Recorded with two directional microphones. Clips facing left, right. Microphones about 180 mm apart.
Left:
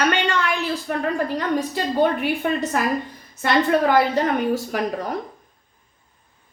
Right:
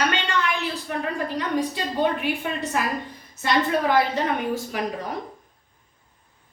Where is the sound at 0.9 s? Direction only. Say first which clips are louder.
Left 4 dB; 45° left (ahead or behind).